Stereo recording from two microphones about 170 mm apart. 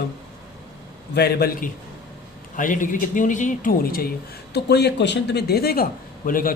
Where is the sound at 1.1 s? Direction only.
70° left (ahead or behind).